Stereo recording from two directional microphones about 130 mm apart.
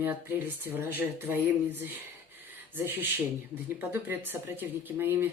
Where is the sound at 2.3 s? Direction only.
15° right (ahead or behind).